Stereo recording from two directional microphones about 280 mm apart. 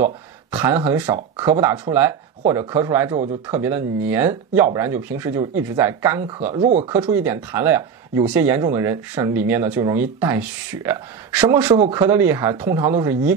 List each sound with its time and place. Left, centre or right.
0.0 s speech: centre
6.9 s speech: centre